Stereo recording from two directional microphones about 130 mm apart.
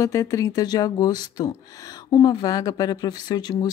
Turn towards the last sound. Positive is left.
turn(degrees=30)  # may be behind; listen again after turning